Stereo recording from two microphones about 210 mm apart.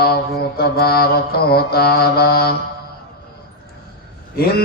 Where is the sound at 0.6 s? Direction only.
45° left (ahead or behind).